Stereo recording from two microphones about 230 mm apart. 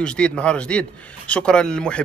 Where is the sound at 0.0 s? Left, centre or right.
Centre.